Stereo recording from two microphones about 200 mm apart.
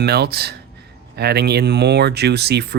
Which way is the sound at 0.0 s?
55° right (ahead or behind).